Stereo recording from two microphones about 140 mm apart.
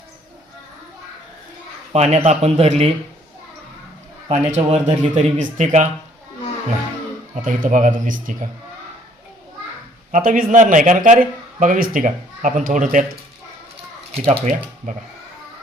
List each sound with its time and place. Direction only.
1.9 s speech: 50° right (ahead or behind)
4.3 s speech: 55° right (ahead or behind)
7.4 s speech: 75° right (ahead or behind)
10.1 s speech: 80° right
14.3 s speech: 60° right (ahead or behind)